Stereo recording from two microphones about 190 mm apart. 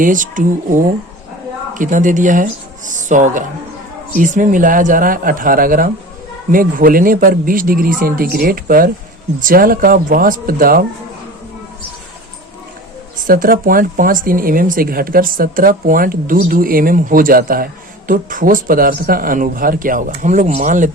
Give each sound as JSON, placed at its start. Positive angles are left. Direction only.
{"t": 0.0, "sound": "speech", "side_deg": -45}
{"t": 13.2, "sound": "speech", "side_deg": -50}